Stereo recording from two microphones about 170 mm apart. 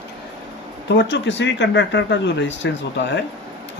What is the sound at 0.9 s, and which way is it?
Speech, 90° left.